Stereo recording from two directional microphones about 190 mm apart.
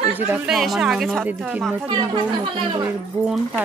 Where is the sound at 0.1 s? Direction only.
5° right (ahead or behind).